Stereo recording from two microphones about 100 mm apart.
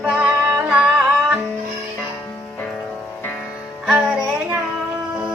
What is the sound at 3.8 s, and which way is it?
Music, 15° right (ahead or behind).